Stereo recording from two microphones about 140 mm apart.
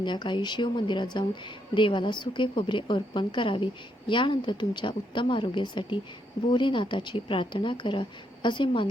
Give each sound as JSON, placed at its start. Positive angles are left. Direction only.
{"t": 0.0, "sound": "a woman's voice", "side_deg": 35}